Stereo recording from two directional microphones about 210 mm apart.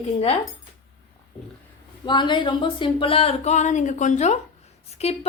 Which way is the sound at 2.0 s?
20° left (ahead or behind).